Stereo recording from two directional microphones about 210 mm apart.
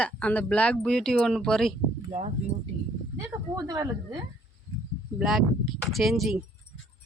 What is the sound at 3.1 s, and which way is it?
Speech, 15° right (ahead or behind).